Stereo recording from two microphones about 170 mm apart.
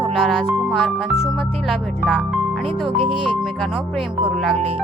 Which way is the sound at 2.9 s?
30° right (ahead or behind).